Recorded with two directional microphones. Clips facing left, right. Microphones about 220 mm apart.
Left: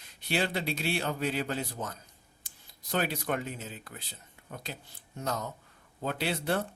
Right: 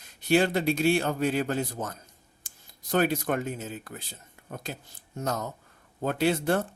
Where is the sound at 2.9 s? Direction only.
45° right (ahead or behind).